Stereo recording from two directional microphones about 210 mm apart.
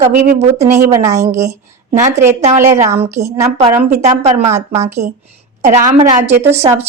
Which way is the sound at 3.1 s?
15° right (ahead or behind).